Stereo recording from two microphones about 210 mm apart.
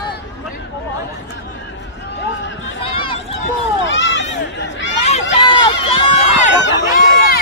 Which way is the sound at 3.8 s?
60° left (ahead or behind).